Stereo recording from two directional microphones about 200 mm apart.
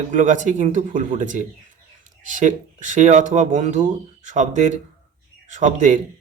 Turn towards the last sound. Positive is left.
turn(degrees=-40)  # may be behind; listen again after turning